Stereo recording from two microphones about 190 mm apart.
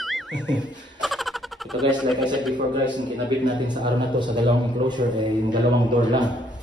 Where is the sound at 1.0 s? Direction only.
Centre (ahead or behind).